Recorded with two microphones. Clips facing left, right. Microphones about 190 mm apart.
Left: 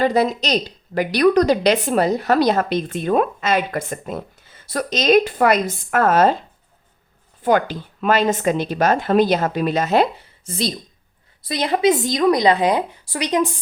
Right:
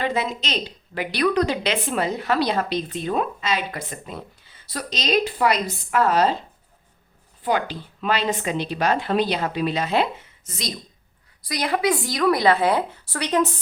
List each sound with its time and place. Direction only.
0.0 s a woman's voice: 40° left (ahead or behind)
7.4 s a woman's voice: 45° left (ahead or behind); by 13.5 s 15° left (ahead or behind)